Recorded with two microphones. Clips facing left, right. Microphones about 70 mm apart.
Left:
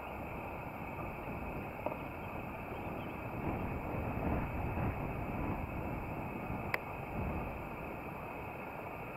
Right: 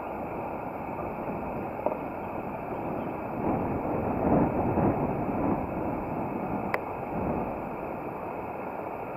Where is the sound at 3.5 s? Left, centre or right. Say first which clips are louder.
Right 12 dB; right.